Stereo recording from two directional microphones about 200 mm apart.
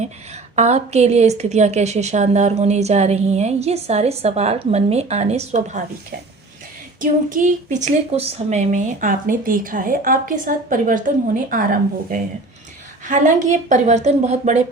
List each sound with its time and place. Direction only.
0.5 s a woman's voice: 35° right (ahead or behind)